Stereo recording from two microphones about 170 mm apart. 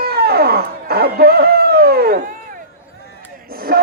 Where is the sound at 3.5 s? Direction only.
60° right (ahead or behind).